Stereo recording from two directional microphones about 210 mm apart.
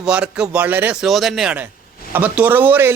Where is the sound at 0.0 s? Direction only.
5° right (ahead or behind).